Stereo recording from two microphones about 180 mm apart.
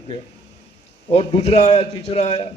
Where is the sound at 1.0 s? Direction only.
35° left (ahead or behind).